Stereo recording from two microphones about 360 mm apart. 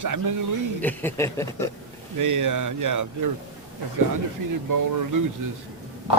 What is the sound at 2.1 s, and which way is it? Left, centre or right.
Speech, right.